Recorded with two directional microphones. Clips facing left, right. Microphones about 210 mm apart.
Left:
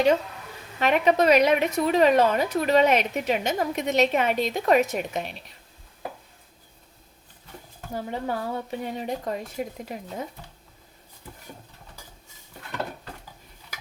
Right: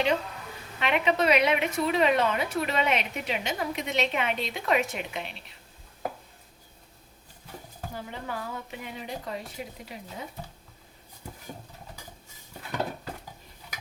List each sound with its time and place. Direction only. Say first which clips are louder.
0.8 s a woman's voice: left 5 dB; 45° left (ahead or behind)
7.9 s a woman's voice: left 8 dB; 35° left (ahead or behind)